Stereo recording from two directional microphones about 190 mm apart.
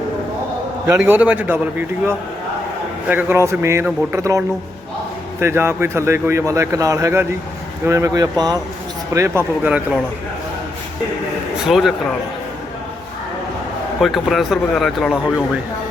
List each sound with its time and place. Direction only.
0.9 s speech: 10° right (ahead or behind)
3.1 s speech: 10° right (ahead or behind)
11.6 s speech: centre (ahead or behind)
14.0 s speech: centre (ahead or behind)